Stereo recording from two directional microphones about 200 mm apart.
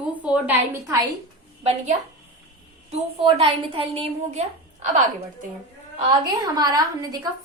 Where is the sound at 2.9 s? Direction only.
30° right (ahead or behind).